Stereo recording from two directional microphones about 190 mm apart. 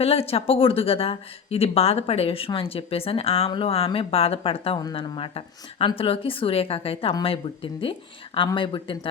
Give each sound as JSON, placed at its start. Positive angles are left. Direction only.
{"t": 0.0, "sound": "speech", "side_deg": 30}